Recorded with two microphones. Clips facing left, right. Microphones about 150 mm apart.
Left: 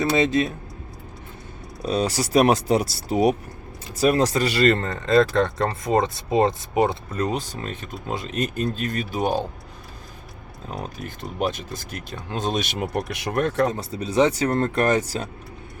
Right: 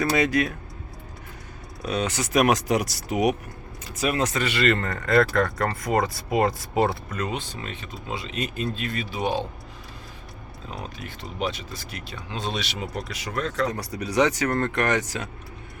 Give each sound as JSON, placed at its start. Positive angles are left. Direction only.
{"t": 0.0, "sound": "speech", "side_deg": 25}
{"t": 1.8, "sound": "speech", "side_deg": 35}
{"t": 4.8, "sound": "speech", "side_deg": 25}
{"t": 7.1, "sound": "speech", "side_deg": 35}
{"t": 10.7, "sound": "speech", "side_deg": 45}
{"t": 13.7, "sound": "speech", "side_deg": 25}